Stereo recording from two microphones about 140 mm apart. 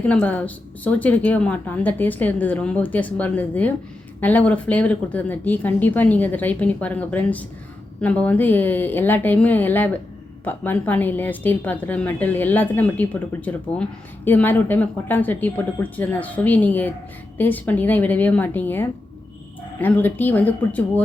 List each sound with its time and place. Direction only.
0.0 s a woman's voice: 10° left (ahead or behind)